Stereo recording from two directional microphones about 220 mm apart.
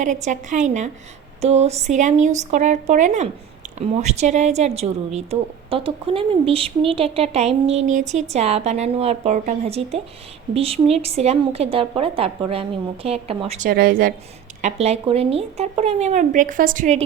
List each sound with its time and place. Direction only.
0.0 s a woman's voice: 35° right (ahead or behind)
13.7 s speech: 40° right (ahead or behind)
14.6 s a woman's voice: 30° right (ahead or behind)